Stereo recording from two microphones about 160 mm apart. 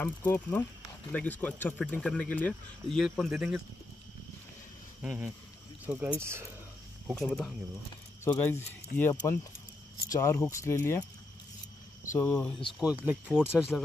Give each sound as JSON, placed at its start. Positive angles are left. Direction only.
{"t": 0.0, "sound": "speech", "side_deg": 10}
{"t": 5.0, "sound": "speech", "side_deg": -10}
{"t": 7.2, "sound": "speech", "side_deg": 0}
{"t": 12.1, "sound": "speech", "side_deg": 15}
{"t": 12.7, "sound": "speech", "side_deg": -10}